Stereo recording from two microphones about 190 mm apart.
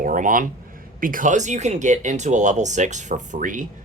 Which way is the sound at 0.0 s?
45° right (ahead or behind).